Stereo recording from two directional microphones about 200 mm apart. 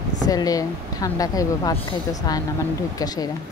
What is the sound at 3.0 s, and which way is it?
Speech, 20° left (ahead or behind).